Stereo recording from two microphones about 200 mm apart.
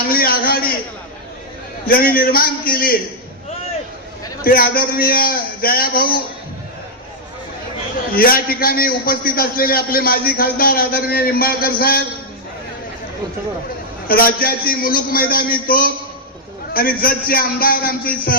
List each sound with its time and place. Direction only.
0.1 s a sound: 50° left (ahead or behind)
1.9 s a man's voice: 45° left (ahead or behind)
4.4 s a man's voice: 45° left (ahead or behind)
8.1 s a man's voice: 45° left (ahead or behind)
14.1 s a man's voice: 50° left (ahead or behind)